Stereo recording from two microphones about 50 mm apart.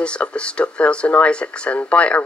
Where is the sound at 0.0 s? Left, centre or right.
Left.